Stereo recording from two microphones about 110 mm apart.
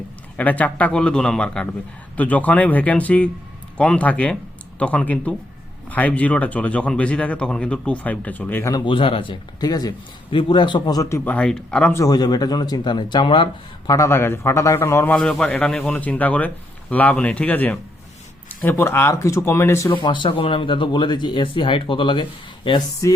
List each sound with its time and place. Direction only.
0.3 s speech: 15° left (ahead or behind)
8.8 s speech: 50° left (ahead or behind); by 11.2 s 35° left (ahead or behind)
11.3 s speech: 10° left (ahead or behind)
11.9 s speech: 35° left (ahead or behind)
13.9 s speech: 25° left (ahead or behind)
15.1 s speech: 5° left (ahead or behind); by 19.9 s 25° left (ahead or behind)
19.9 s speech: 45° left (ahead or behind)
23.0 s speech: 30° left (ahead or behind)